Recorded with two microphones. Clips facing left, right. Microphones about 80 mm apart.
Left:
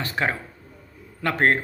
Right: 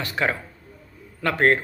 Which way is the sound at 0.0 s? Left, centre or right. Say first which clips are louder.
Right 1 dB; left.